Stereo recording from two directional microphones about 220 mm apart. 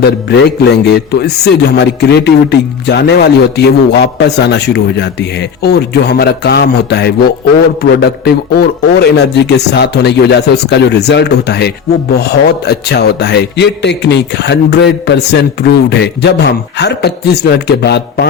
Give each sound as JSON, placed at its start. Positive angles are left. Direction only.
{"t": 0.3, "sound": "a man's voice", "side_deg": 50}